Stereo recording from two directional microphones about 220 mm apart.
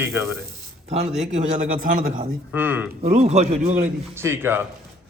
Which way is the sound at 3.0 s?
30° right (ahead or behind).